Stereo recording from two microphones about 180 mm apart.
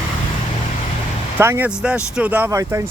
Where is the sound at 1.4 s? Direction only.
10° right (ahead or behind).